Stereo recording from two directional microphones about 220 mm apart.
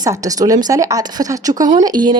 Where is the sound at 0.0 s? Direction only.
15° right (ahead or behind).